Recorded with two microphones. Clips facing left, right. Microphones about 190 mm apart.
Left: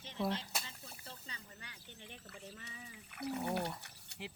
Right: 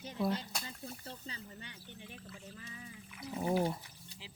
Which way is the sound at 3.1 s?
65° left (ahead or behind).